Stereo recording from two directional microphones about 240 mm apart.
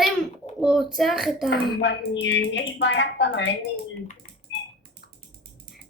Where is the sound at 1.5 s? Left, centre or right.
Left.